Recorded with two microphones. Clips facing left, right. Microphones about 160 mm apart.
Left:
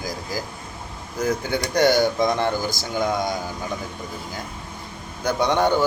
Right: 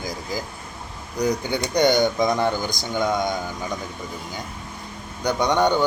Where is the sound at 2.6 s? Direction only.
5° left (ahead or behind).